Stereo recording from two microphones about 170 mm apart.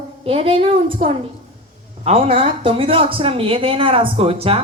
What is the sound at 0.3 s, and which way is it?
Speech, 35° right (ahead or behind).